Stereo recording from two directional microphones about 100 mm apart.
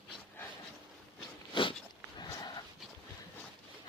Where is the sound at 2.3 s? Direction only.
40° left (ahead or behind).